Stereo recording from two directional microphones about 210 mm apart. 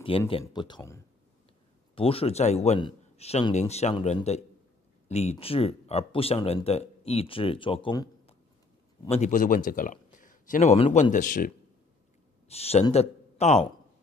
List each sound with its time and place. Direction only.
0.3 s speech: 25° left (ahead or behind)
2.0 s a man's voice: 25° left (ahead or behind)
9.1 s a man's voice: 35° left (ahead or behind)
12.4 s speech: 30° left (ahead or behind)